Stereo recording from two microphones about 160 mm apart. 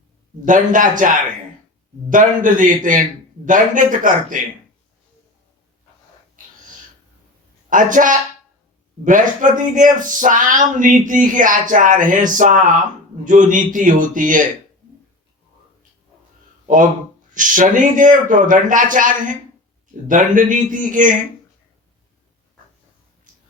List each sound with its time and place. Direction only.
0.4 s speech: 55° right (ahead or behind)
7.7 s speech: 55° right (ahead or behind)
17.3 s speech: 55° right (ahead or behind)